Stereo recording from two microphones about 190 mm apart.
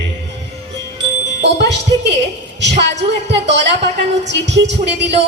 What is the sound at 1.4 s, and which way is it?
A woman's voice, 65° right (ahead or behind).